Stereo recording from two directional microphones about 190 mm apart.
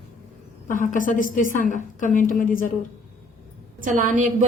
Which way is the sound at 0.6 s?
45° left (ahead or behind).